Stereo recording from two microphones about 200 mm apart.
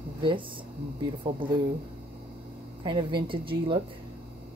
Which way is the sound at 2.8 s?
25° right (ahead or behind).